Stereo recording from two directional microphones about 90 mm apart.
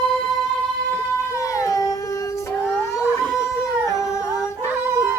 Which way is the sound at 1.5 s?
40° left (ahead or behind).